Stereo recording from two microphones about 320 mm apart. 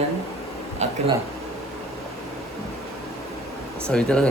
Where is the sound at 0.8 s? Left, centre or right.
Right.